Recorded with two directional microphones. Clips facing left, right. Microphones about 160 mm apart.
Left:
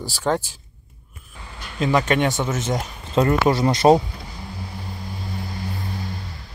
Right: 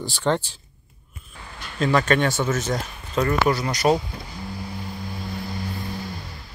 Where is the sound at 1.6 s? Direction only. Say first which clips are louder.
Left 1 dB; 15° left (ahead or behind).